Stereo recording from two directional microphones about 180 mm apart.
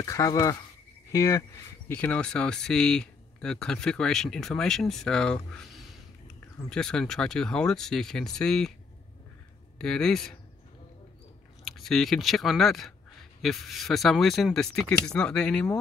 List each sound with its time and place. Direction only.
0.0 s speech: 20° left (ahead or behind); by 8.7 s 5° left (ahead or behind)
9.8 s speech: 5° left (ahead or behind)
11.6 s speech: centre (ahead or behind)